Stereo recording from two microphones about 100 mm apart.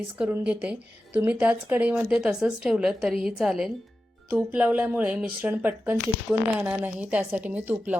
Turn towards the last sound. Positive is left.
turn(degrees=-15)  # may be behind; listen again after turning